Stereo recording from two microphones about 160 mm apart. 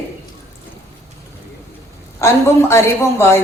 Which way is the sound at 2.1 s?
15° left (ahead or behind).